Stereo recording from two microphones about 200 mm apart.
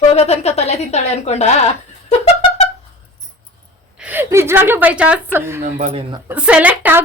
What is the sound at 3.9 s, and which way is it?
A woman's voice, 10° right (ahead or behind).